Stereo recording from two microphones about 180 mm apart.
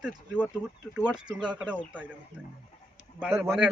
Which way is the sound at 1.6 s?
10° right (ahead or behind).